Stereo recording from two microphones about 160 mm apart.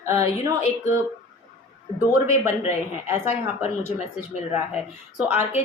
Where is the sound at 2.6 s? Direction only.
45° left (ahead or behind).